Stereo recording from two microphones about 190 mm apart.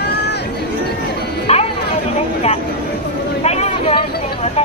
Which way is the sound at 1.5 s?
35° left (ahead or behind).